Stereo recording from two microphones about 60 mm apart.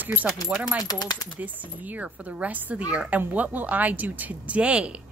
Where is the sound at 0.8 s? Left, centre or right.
Left.